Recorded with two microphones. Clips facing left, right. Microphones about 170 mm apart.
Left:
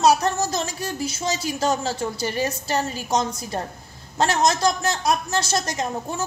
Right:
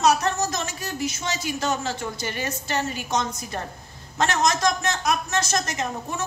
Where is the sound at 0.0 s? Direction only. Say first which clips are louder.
Left 2 dB; 30° left (ahead or behind).